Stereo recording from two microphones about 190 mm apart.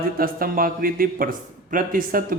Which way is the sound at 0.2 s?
50° right (ahead or behind).